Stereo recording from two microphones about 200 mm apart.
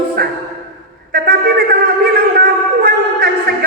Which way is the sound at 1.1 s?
50° right (ahead or behind).